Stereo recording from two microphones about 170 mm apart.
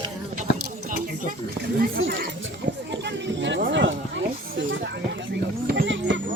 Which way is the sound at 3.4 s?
90° right.